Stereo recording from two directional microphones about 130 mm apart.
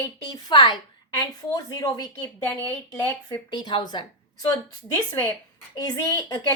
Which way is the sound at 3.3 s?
35° left (ahead or behind).